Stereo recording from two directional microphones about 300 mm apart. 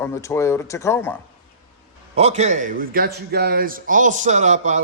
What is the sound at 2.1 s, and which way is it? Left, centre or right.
A man's voice, right.